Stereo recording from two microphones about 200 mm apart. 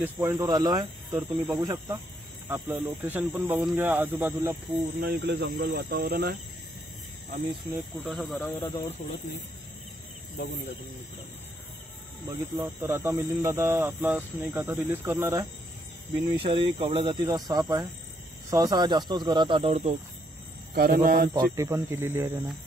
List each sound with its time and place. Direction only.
0.0 s speech: 10° right (ahead or behind)
5.0 s speech: 50° right (ahead or behind)
7.7 s speech: centre (ahead or behind)
8.5 s speech: 20° left (ahead or behind)
12.3 s speech: 20° right (ahead or behind)
16.3 s speech: 25° right (ahead or behind)
20.7 s speech: 45° right (ahead or behind)
21.3 s speech: 20° right (ahead or behind)